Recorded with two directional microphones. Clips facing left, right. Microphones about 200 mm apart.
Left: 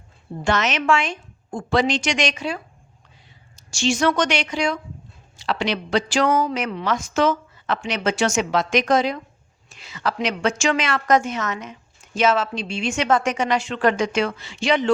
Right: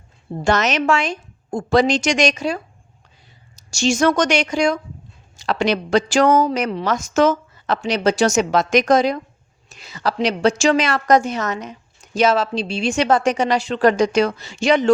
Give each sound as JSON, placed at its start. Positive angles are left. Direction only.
{"t": 0.4, "sound": "a woman's voice", "side_deg": -40}